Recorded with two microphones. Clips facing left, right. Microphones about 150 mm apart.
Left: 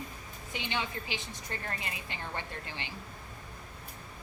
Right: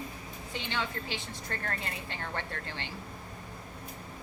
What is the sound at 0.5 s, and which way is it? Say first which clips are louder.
A woman's voice: even; 15° left (ahead or behind).